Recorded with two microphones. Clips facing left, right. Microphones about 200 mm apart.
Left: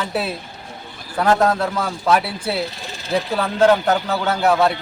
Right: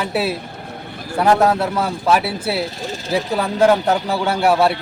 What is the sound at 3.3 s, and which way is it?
A man's voice, 10° right (ahead or behind).